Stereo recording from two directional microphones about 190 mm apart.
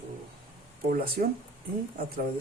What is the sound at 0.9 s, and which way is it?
Speech, 50° right (ahead or behind).